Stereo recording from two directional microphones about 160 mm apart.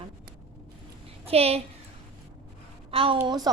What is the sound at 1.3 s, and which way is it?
Speech, 40° right (ahead or behind).